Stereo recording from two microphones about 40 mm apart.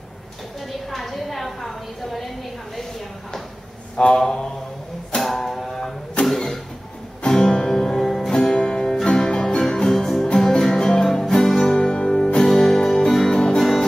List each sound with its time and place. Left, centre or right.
0.7 s a sound: centre
3.9 s a sound: left
5.1 s music: centre
7.2 s music: centre
8.3 s music: centre
11.7 s music: left